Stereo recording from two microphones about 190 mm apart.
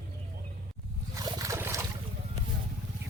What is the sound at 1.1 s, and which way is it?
Trickle, 15° right (ahead or behind).